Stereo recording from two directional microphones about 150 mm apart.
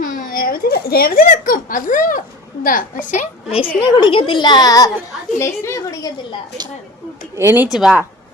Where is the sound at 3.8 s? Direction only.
30° left (ahead or behind).